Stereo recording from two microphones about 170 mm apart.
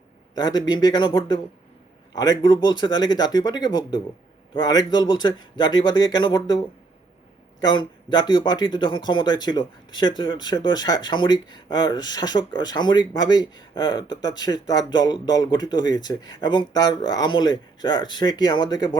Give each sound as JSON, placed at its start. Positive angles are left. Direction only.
{"t": 0.3, "sound": "speech", "side_deg": 25}
{"t": 7.6, "sound": "speech", "side_deg": 25}